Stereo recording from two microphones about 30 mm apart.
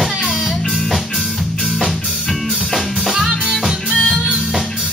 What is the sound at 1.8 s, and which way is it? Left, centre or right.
Music, centre.